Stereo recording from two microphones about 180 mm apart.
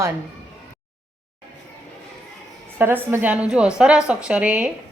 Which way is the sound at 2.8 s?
10° right (ahead or behind).